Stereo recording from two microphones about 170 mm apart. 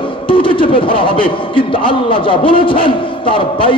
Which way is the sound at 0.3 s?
30° left (ahead or behind).